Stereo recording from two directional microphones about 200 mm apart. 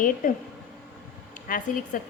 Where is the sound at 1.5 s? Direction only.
45° left (ahead or behind).